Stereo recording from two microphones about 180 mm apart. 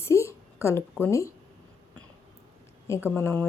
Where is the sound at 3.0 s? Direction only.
15° left (ahead or behind).